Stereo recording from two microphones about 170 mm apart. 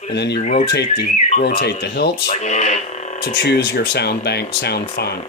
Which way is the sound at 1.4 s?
70° left (ahead or behind).